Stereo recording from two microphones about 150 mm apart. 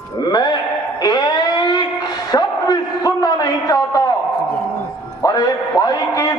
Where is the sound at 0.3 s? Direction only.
25° left (ahead or behind).